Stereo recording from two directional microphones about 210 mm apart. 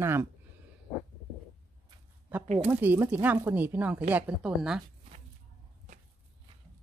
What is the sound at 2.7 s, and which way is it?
Speech, 10° right (ahead or behind).